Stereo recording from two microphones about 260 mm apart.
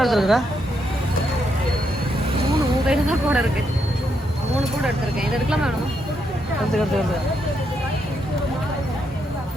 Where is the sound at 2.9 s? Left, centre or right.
Centre.